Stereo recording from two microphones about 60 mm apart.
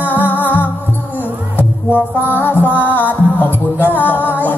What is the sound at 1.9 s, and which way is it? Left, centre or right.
Music, left.